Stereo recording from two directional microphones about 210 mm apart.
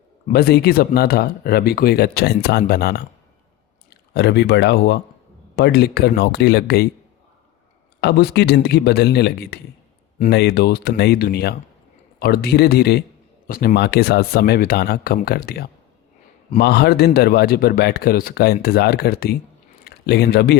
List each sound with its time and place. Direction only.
0.3 s speech: 45° left (ahead or behind)
8.0 s speech: 50° left (ahead or behind)